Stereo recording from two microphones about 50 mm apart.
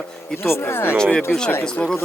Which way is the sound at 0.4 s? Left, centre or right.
Left.